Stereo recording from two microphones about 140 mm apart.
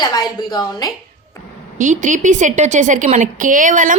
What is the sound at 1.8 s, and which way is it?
A woman's voice, 65° right (ahead or behind).